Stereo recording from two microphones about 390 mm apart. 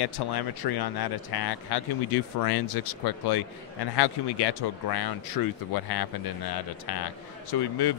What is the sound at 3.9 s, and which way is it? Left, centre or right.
Speech, left.